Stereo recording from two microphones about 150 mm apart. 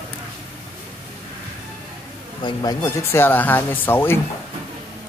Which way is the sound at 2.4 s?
25° left (ahead or behind).